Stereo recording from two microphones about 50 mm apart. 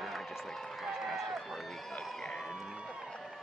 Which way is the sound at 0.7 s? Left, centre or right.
Centre.